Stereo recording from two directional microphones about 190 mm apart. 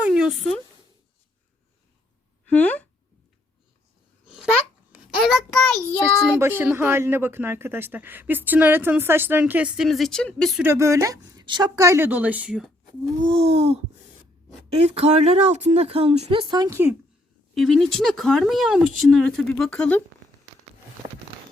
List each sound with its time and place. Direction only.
0.0 s a sound: 5° right (ahead or behind)
2.5 s speech: 5° left (ahead or behind)
4.9 s a child's voice: centre (ahead or behind)
6.4 s speech: 10° right (ahead or behind)
10.6 s speech: 15° right (ahead or behind)
13.2 s speech: 30° right (ahead or behind)
14.8 s speech: 35° right (ahead or behind)
17.5 s speech: centre (ahead or behind)